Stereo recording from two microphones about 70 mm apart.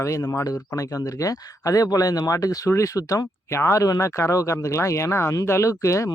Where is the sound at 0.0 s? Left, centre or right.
Left.